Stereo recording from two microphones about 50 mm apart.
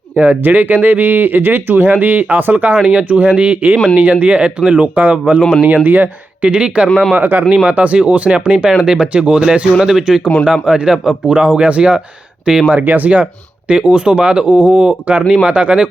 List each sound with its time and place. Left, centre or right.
0.2 s speech: right
5.6 s speech: right
6.4 s speech: right
7.2 s speech: right
7.5 s speech: right
12.7 s speech: right